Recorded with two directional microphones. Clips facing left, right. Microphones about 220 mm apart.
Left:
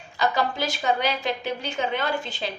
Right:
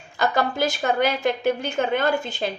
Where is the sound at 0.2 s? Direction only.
50° right (ahead or behind).